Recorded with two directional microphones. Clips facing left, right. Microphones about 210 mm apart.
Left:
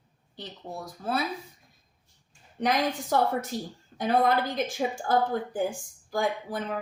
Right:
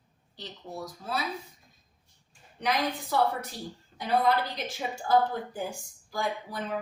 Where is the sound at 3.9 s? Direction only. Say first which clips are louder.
Left 2 dB; 50° left (ahead or behind).